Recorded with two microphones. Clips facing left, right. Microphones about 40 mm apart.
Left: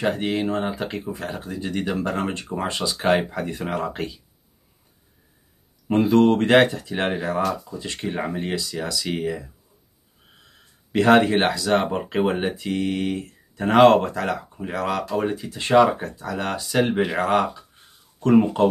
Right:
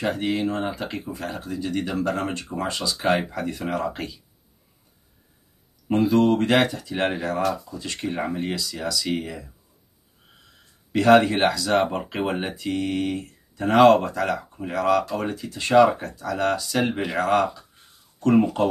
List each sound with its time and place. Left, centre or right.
0.0 s speech: centre
5.9 s speech: left
7.0 s speech: centre
7.3 s speech: centre
10.9 s speech: left
11.7 s speech: centre
15.9 s speech: centre